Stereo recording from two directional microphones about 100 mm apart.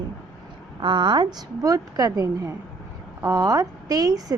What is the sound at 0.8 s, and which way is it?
A woman's voice, 50° right (ahead or behind).